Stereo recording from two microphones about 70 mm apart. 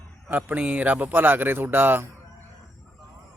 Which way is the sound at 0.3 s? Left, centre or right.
Right.